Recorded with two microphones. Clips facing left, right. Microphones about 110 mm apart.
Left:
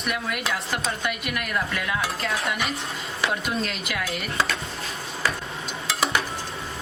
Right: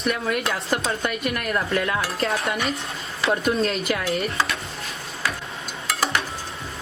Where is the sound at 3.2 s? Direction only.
40° right (ahead or behind).